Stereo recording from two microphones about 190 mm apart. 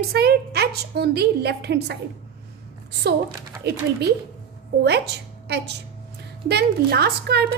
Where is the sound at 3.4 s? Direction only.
55° right (ahead or behind).